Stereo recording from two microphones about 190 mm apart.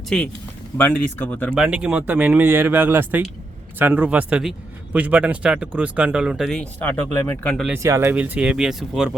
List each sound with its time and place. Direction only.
0.1 s speech: 5° left (ahead or behind)
1.5 s speech: 5° right (ahead or behind)
7.7 s speech: 15° right (ahead or behind)